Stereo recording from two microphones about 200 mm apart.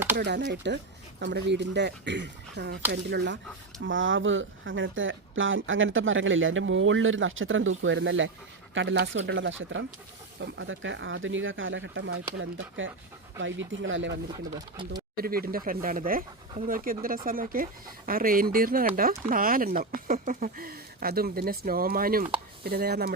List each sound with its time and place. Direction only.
0.2 s speech: 60° right (ahead or behind)
3.8 s speech: 70° right (ahead or behind)
14.3 s speech: 20° right (ahead or behind)
15.2 s speech: 45° right (ahead or behind)